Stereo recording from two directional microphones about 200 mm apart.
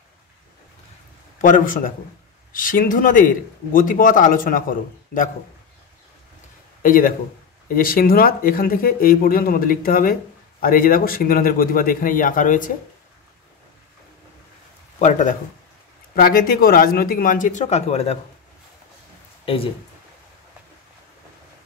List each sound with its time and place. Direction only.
1.4 s a man's voice: 40° left (ahead or behind)
6.8 s a man's voice: 45° left (ahead or behind)
15.0 s a man's voice: 40° left (ahead or behind)
19.4 s speech: 30° left (ahead or behind)